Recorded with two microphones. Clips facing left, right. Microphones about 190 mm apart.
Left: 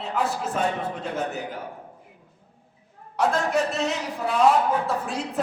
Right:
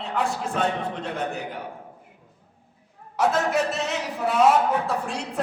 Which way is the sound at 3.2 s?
Centre (ahead or behind).